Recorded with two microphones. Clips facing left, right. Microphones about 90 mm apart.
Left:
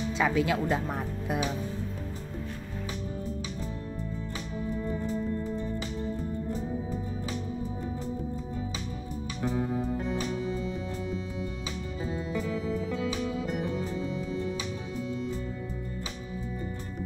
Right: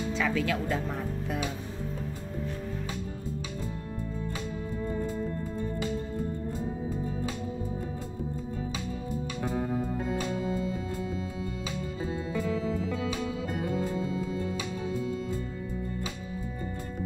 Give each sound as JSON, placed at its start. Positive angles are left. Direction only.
{"t": 0.0, "sound": "speech", "side_deg": 20}